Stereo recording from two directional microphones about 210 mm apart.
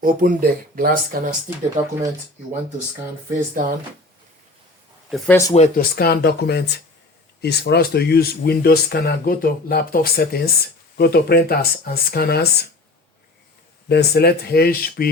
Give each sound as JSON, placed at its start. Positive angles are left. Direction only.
{"t": 0.0, "sound": "speech", "side_deg": -40}
{"t": 3.3, "sound": "speech", "side_deg": -40}
{"t": 5.1, "sound": "speech", "side_deg": 0}
{"t": 5.5, "sound": "speech", "side_deg": 45}
{"t": 13.8, "sound": "speech", "side_deg": 50}